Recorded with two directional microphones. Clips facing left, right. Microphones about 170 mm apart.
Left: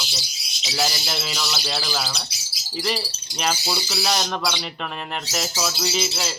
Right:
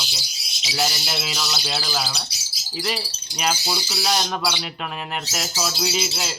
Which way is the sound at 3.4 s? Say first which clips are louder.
Even; 5° right (ahead or behind).